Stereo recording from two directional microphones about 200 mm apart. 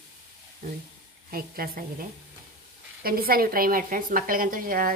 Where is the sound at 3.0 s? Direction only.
50° right (ahead or behind).